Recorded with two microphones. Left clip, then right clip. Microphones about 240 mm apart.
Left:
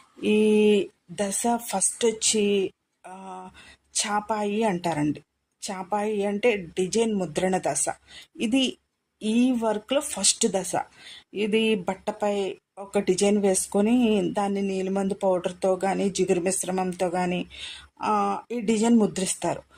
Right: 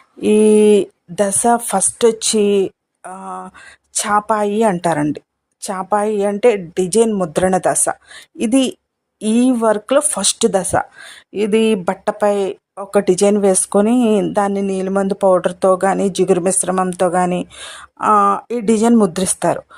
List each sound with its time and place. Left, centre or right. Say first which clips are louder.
0.2 s speech: right 10 dB; right